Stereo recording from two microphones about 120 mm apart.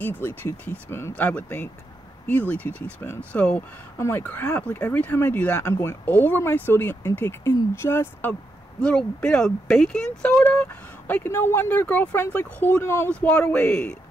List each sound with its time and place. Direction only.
0.0 s speech: 15° left (ahead or behind)
5.6 s speech: 25° left (ahead or behind)
13.1 s speech: 10° left (ahead or behind)